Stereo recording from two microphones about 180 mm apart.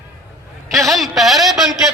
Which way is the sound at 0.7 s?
Centre (ahead or behind).